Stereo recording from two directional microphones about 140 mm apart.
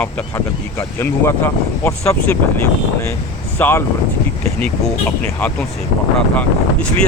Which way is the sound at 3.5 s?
15° left (ahead or behind).